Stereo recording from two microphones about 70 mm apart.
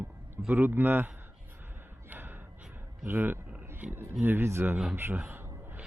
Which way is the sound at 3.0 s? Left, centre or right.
Right.